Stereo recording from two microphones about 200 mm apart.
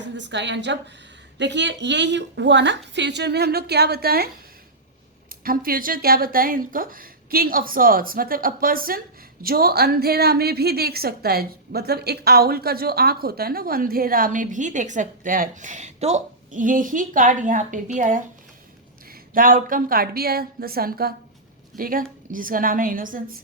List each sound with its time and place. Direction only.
0.0 s a woman's voice: 60° right (ahead or behind)
5.4 s a woman's voice: 45° right (ahead or behind)
19.3 s a woman's voice: 45° right (ahead or behind)